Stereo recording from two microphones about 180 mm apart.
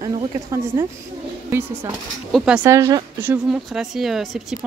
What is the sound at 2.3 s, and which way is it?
Speech, 5° right (ahead or behind).